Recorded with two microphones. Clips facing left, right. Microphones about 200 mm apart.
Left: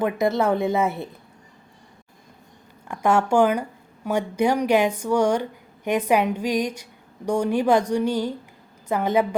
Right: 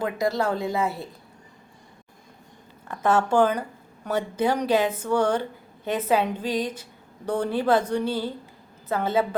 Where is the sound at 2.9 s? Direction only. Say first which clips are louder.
Left 2 dB; 10° left (ahead or behind).